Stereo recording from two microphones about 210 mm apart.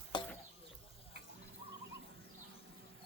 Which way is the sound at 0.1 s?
20° left (ahead or behind).